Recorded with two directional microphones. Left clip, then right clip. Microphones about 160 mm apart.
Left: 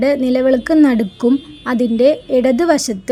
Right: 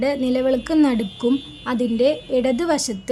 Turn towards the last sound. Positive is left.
turn(degrees=30)  # may be behind; listen again after turning